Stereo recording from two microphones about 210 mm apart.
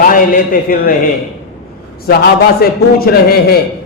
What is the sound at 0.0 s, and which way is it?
Speech, 40° left (ahead or behind).